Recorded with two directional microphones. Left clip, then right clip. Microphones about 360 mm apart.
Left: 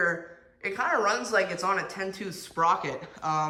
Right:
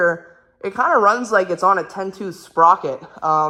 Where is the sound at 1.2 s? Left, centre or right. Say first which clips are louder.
Right 9 dB; centre.